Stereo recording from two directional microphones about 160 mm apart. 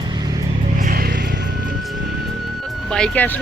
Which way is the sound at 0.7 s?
60° right (ahead or behind).